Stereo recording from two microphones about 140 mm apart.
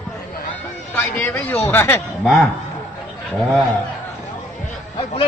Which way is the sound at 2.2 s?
Centre (ahead or behind).